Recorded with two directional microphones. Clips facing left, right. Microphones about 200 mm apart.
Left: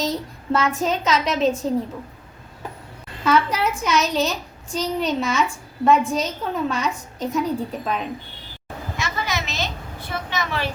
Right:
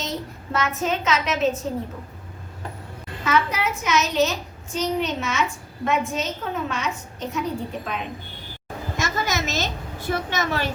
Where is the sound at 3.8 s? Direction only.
35° left (ahead or behind).